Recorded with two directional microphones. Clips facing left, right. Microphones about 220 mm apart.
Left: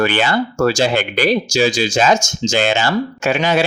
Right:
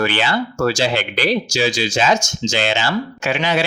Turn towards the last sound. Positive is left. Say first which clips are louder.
# left 3 dB
turn(degrees=45)  # may be behind; listen again after turning